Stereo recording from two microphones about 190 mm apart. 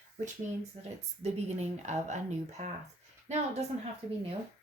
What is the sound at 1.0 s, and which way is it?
A woman's voice, 35° right (ahead or behind).